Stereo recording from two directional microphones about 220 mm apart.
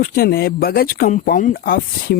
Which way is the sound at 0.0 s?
40° left (ahead or behind).